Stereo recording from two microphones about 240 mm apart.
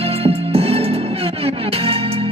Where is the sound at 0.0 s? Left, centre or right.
Right.